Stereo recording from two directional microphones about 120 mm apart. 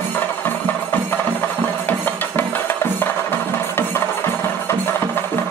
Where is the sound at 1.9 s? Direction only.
15° left (ahead or behind).